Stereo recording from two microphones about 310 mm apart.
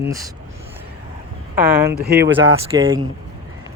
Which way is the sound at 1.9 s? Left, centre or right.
Right.